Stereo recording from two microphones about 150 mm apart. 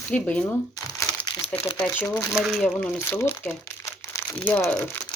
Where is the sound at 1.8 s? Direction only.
15° left (ahead or behind).